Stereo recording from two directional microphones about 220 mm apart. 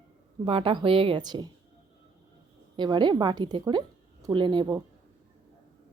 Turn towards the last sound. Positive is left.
turn(degrees=-20)  # may be behind; listen again after turning